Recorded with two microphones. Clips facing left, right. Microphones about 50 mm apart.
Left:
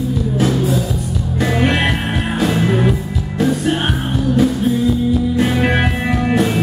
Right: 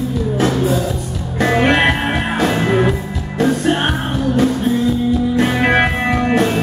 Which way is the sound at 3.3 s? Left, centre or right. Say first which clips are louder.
Right 1 dB; centre.